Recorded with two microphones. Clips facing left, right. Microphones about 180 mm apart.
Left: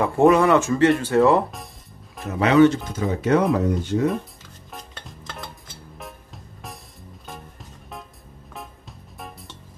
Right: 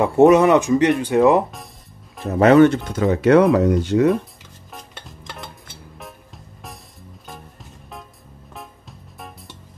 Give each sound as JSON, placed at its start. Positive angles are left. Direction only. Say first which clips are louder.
{"t": 0.0, "sound": "speech", "louder": "right 4 dB", "side_deg": -20}
{"t": 2.2, "sound": "speech", "louder": "right 4 dB", "side_deg": -45}
{"t": 4.7, "sound": "stir", "louder": "even", "side_deg": 0}
{"t": 5.9, "sound": "music", "louder": "left 1 dB", "side_deg": 0}
{"t": 8.5, "sound": "music", "louder": "even", "side_deg": 0}